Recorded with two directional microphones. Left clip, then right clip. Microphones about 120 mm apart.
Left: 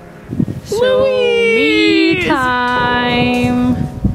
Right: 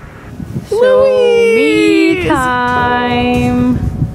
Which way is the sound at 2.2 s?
25° left (ahead or behind).